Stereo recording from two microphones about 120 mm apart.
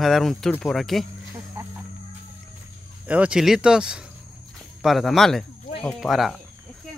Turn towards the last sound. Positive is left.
turn(degrees=0)  # may be behind; listen again after turning